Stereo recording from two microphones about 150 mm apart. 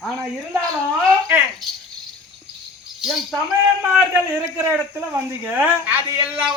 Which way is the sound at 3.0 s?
Centre (ahead or behind).